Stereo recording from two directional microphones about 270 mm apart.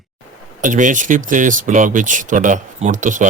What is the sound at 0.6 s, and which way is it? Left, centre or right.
Speech, right.